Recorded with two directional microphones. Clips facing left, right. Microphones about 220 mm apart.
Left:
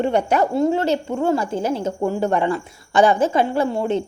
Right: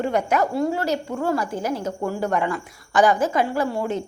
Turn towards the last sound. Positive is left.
turn(degrees=25)  # may be behind; listen again after turning